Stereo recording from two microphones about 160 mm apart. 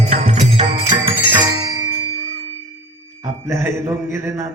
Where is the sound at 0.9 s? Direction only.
35° right (ahead or behind).